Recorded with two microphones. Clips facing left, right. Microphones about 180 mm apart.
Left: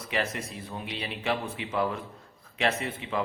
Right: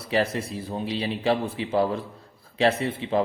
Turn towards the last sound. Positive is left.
turn(degrees=-30)  # may be behind; listen again after turning